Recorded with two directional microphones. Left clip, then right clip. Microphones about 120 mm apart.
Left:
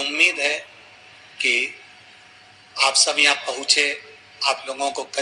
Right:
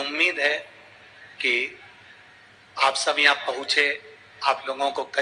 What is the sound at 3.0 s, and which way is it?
A man's voice, 25° left (ahead or behind).